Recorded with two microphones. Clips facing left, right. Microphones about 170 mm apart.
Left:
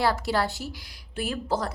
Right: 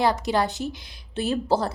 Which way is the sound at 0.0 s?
20° right (ahead or behind).